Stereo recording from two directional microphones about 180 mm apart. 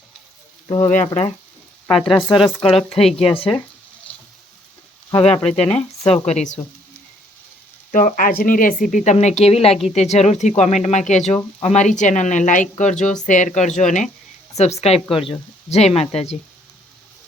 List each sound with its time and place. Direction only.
0.7 s speech: 40° left (ahead or behind)
1.9 s speech: centre (ahead or behind)
5.1 s speech: 5° left (ahead or behind)
5.5 s speech: 35° left (ahead or behind)
7.9 s speech: 45° left (ahead or behind)